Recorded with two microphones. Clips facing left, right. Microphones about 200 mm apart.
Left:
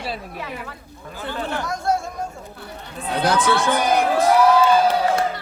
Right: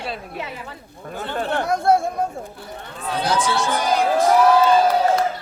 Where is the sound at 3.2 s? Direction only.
55° left (ahead or behind).